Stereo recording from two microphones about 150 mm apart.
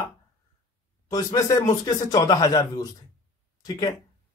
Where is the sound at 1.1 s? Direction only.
25° left (ahead or behind).